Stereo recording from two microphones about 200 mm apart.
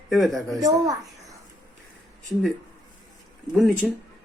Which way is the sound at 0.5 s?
15° right (ahead or behind).